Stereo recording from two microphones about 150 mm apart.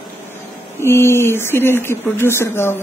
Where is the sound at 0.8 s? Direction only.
15° left (ahead or behind).